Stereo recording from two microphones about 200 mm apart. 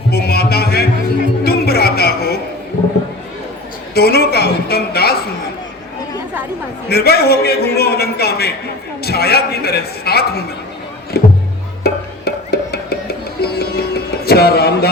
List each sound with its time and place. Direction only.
0.1 s music: 50° left (ahead or behind)
3.9 s a woman's voice: 50° left (ahead or behind)
6.8 s a man's voice: 50° left (ahead or behind)
11.8 s music: 50° left (ahead or behind)